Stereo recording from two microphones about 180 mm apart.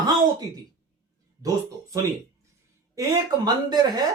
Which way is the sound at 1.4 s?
20° right (ahead or behind).